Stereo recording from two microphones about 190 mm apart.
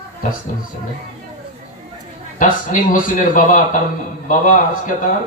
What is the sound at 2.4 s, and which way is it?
A man's voice, 45° left (ahead or behind).